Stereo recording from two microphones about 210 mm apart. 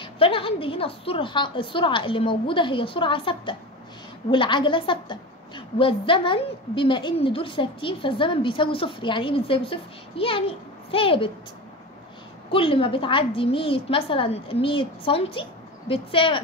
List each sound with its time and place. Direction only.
0.0 s a woman's voice: 25° left (ahead or behind)
12.5 s a woman's voice: 25° left (ahead or behind)